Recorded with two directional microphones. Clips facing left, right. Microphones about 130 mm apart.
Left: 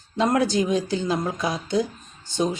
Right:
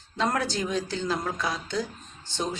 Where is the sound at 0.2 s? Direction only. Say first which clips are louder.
Left 6 dB; 15° left (ahead or behind).